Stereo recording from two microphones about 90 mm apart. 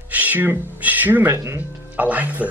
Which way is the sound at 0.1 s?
20° right (ahead or behind).